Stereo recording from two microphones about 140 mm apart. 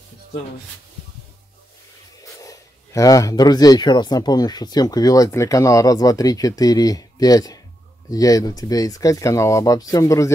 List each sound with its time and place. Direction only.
2.2 s speech: 25° left (ahead or behind)